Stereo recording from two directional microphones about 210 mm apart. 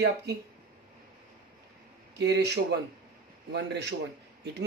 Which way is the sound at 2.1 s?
55° right (ahead or behind).